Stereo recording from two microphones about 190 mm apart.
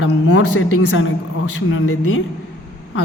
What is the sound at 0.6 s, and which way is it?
A woman's voice, 85° left.